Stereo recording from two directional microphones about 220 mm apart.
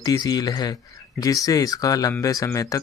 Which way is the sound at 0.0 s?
15° left (ahead or behind).